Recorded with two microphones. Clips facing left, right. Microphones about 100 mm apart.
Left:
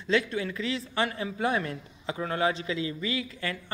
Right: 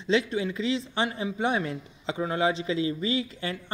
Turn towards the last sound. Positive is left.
turn(degrees=-25)  # may be behind; listen again after turning